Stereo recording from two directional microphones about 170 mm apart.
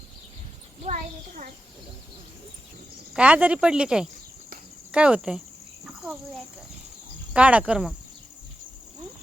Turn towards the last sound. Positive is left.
turn(degrees=-5)  # may be behind; listen again after turning